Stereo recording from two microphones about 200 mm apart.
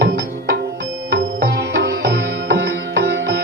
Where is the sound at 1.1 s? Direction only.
55° right (ahead or behind).